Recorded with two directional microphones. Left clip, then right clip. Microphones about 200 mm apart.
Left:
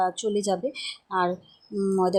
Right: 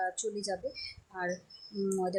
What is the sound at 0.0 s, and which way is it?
Speech, 30° left (ahead or behind).